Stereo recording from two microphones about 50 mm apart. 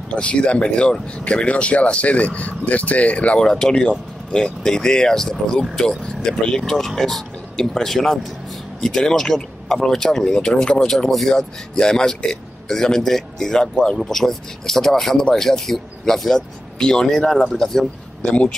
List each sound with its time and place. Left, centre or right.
0.1 s speech: left
3.3 s speech: centre
18.2 s speech: centre